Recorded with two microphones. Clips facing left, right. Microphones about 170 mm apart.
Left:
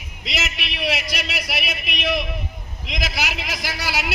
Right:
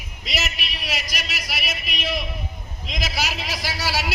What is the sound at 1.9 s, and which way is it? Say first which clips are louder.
Speech: left 5 dB; 20° left (ahead or behind).